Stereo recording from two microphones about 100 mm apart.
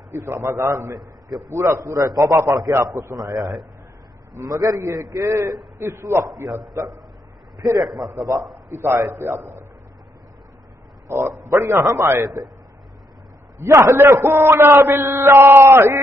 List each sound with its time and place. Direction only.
0.1 s a man's voice: 25° right (ahead or behind)
0.9 s a man's voice: centre (ahead or behind)
1.5 s a man's voice: 30° right (ahead or behind)
3.3 s a man's voice: centre (ahead or behind)
4.3 s a man's voice: 35° right (ahead or behind)
7.8 s a man's voice: centre (ahead or behind)
8.7 s a man's voice: 20° right (ahead or behind)
11.4 s a man's voice: 30° right (ahead or behind)
13.6 s a man's voice: 30° right (ahead or behind)